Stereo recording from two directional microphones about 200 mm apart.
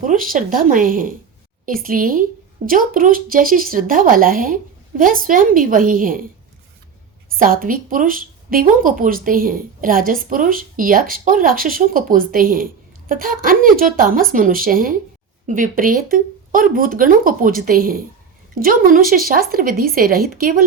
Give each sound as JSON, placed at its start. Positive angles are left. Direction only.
{"t": 0.0, "sound": "speech", "side_deg": -40}
{"t": 7.3, "sound": "speech", "side_deg": -45}